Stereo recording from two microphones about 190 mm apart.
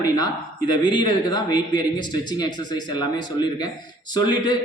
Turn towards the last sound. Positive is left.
turn(degrees=20)  # may be behind; listen again after turning